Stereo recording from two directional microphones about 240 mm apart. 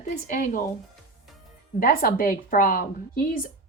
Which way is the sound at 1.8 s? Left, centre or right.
Left.